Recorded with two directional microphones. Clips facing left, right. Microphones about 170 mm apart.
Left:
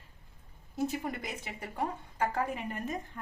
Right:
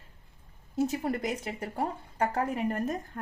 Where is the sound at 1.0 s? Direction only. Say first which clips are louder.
Right 7 dB; 40° right (ahead or behind).